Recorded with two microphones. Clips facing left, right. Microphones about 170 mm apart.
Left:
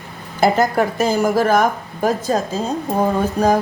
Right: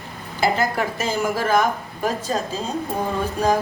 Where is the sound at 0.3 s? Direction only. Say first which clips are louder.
Left 6 dB; 45° left (ahead or behind).